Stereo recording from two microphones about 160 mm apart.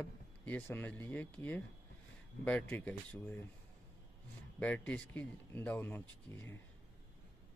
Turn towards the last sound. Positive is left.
turn(degrees=15)  # may be behind; listen again after turning